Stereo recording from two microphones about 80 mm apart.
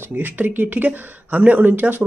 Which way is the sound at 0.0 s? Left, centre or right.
Right.